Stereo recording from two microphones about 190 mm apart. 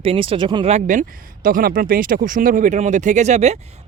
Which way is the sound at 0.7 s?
45° right (ahead or behind).